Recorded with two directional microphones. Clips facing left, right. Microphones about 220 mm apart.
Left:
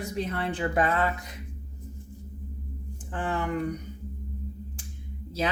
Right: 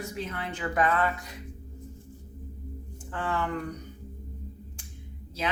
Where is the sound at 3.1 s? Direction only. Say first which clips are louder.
Left 1 dB; 15° left (ahead or behind).